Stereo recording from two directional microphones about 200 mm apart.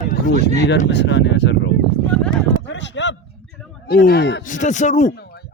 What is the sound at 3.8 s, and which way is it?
Speech, 55° left (ahead or behind).